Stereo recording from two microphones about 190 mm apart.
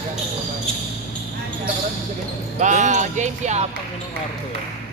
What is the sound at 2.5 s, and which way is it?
Speech, 40° right (ahead or behind).